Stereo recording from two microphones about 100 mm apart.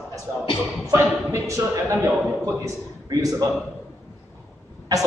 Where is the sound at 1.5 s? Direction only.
30° right (ahead or behind).